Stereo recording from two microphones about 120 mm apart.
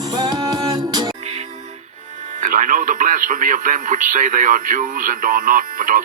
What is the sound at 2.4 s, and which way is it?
Speech, 90° right.